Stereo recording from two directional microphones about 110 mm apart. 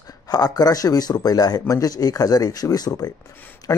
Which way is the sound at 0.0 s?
35° left (ahead or behind).